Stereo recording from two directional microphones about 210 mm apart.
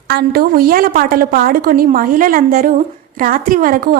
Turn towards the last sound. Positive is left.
turn(degrees=-45)  # may be behind; listen again after turning